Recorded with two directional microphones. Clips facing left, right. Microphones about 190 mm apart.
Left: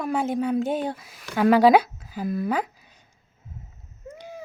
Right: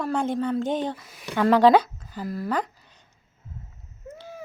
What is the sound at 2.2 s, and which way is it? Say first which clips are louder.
Speech: left 4 dB; 20° left (ahead or behind).